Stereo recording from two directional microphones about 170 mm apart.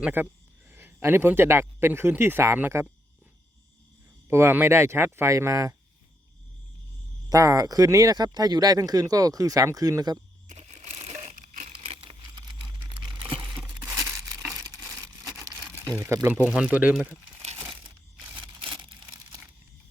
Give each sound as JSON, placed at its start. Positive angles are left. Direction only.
{"t": 0.0, "sound": "speech", "side_deg": -10}
{"t": 4.3, "sound": "speech", "side_deg": -15}
{"t": 7.3, "sound": "speech", "side_deg": -20}
{"t": 10.5, "sound": "crushing", "side_deg": -45}
{"t": 11.7, "sound": "a sound", "side_deg": -35}
{"t": 14.1, "sound": "crumpling", "side_deg": -20}
{"t": 16.0, "sound": "speech", "side_deg": -15}
{"t": 18.3, "sound": "a sound", "side_deg": -30}